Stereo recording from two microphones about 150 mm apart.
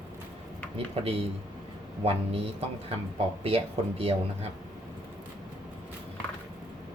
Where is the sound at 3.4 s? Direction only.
40° right (ahead or behind).